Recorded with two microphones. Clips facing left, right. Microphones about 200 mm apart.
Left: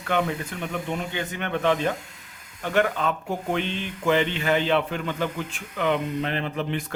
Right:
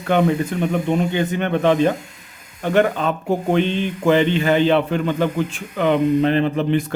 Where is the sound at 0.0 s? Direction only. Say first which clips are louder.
Right 8 dB; 30° right (ahead or behind).